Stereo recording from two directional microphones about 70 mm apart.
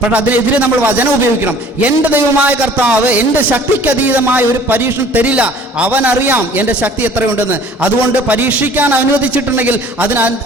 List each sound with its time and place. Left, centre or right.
0.1 s a man's voice: right
8.3 s a man's voice: right